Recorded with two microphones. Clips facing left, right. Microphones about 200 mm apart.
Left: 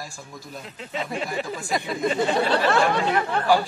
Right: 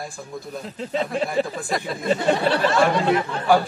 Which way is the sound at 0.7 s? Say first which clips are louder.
Right 6 dB; 35° right (ahead or behind).